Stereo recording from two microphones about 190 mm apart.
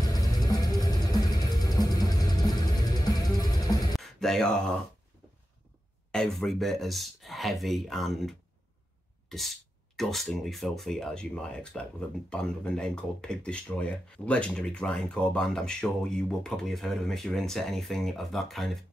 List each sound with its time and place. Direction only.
0.0 s music: 20° left (ahead or behind)
3.9 s a sound: centre (ahead or behind)
6.1 s speech: centre (ahead or behind)